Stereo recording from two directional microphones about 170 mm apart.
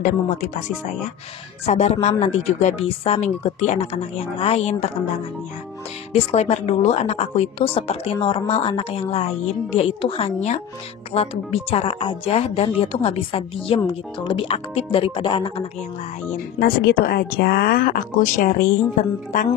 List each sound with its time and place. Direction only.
0.0 s speech: 45° left (ahead or behind)
6.1 s speech: 40° left (ahead or behind)
16.5 s speech: 60° left (ahead or behind)